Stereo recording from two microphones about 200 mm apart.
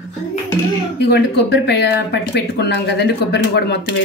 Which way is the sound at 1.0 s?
60° left (ahead or behind).